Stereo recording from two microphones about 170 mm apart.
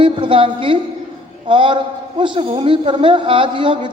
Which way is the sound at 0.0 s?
30° right (ahead or behind).